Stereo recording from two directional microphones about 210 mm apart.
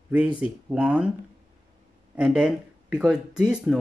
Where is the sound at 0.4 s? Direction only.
5° right (ahead or behind).